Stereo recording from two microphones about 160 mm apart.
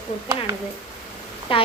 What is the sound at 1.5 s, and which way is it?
Speech, 35° left (ahead or behind).